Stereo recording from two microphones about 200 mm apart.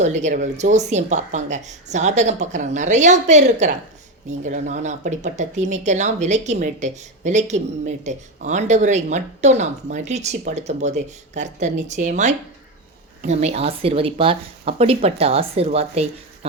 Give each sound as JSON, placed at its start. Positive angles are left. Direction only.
{"t": 0.0, "sound": "speech", "side_deg": -35}